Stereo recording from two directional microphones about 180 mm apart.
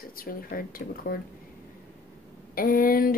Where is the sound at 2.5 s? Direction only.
50° left (ahead or behind).